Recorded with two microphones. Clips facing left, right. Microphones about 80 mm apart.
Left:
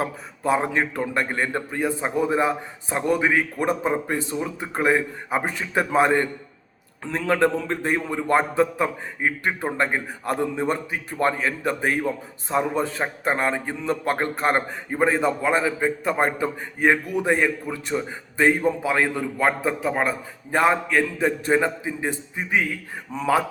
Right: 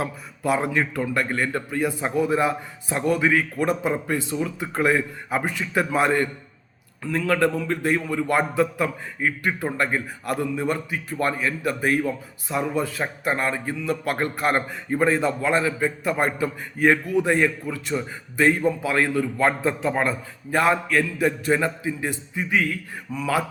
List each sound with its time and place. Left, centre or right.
0.0 s a man's voice: left
23.1 s speech: left